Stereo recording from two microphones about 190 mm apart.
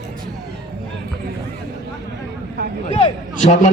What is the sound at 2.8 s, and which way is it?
Speech, 35° left (ahead or behind).